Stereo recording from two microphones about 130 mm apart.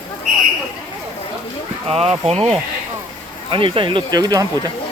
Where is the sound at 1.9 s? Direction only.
50° right (ahead or behind).